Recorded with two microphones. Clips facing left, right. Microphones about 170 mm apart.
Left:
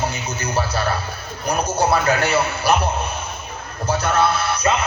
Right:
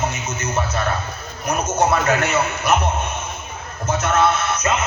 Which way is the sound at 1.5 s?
35° left (ahead or behind).